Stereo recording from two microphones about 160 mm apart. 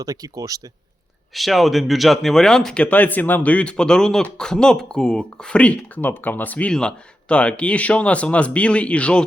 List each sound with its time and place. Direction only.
0.0 s speech: 20° right (ahead or behind)
1.3 s speech: centre (ahead or behind)